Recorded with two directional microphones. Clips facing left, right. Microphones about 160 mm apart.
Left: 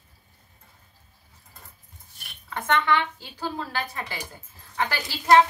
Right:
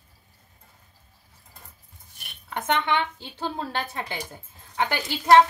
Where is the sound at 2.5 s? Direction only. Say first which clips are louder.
Left 1 dB; 15° right (ahead or behind).